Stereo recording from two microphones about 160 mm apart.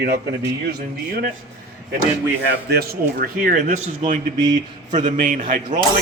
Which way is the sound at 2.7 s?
80° right.